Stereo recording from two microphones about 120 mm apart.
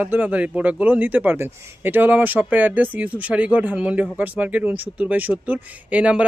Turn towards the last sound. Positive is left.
turn(degrees=-10)  # may be behind; listen again after turning